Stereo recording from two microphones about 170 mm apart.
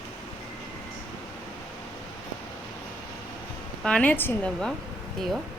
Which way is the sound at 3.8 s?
5° left (ahead or behind).